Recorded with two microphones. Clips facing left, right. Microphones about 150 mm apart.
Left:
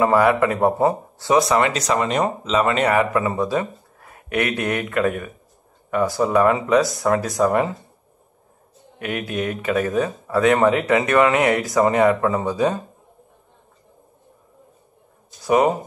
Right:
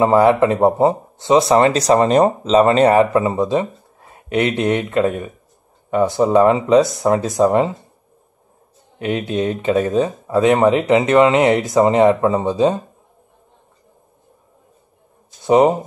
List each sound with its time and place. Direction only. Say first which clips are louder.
0.0 s speech: right 4 dB; 25° right (ahead or behind)
9.0 s speech: right 5 dB; 25° right (ahead or behind)
15.4 s speech: right 4 dB; 25° right (ahead or behind)